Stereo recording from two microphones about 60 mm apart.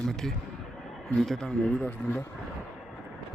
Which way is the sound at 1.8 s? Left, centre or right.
Left.